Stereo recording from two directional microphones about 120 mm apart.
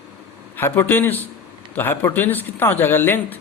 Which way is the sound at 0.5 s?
20° left (ahead or behind).